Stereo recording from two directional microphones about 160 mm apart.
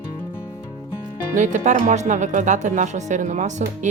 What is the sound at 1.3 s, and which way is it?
Speech, 50° right (ahead or behind).